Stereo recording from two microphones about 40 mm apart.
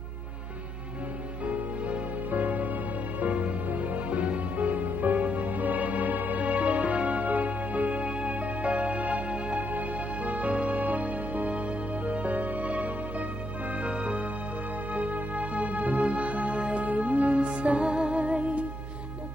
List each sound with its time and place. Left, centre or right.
1.4 s music: right